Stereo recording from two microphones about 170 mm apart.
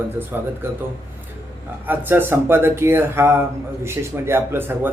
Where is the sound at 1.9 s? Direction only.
10° right (ahead or behind).